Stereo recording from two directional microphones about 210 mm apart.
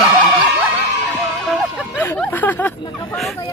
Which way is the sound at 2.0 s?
10° left (ahead or behind).